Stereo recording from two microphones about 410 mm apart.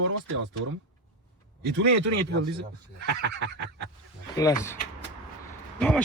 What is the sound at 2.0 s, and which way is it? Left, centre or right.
Speech, right.